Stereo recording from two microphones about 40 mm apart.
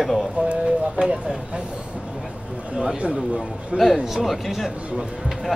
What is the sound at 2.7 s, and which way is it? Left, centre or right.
Speech, centre.